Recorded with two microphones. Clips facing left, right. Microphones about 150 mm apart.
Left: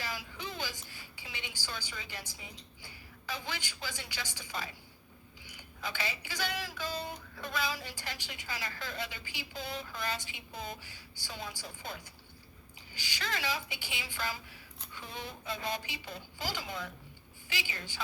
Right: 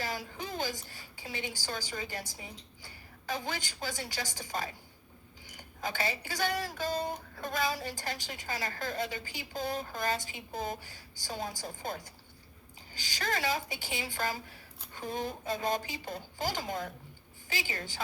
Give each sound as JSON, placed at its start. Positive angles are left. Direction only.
{"t": 0.0, "sound": "a woman's voice", "side_deg": -45}